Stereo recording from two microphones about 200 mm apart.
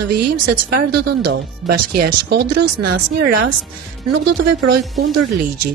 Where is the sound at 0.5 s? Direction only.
55° right (ahead or behind).